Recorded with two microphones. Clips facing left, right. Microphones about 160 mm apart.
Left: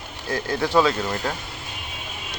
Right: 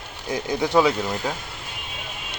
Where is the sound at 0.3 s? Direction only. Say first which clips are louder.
Even; 15° right (ahead or behind).